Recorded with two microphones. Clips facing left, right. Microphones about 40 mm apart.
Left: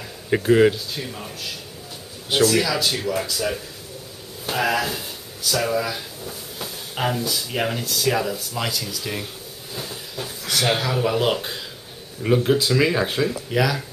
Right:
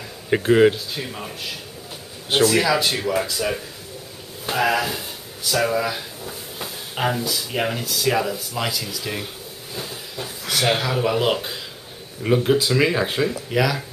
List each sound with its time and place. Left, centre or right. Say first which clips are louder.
0.5 s a man's voice: right 1 dB; centre
3.3 s speech: right 1 dB; centre